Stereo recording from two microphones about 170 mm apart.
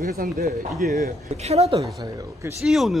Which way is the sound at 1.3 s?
40° right (ahead or behind).